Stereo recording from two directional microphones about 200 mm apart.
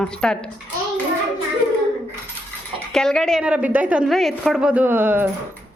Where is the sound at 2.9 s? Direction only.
5° left (ahead or behind).